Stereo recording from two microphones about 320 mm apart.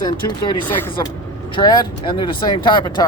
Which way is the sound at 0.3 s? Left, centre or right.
Centre.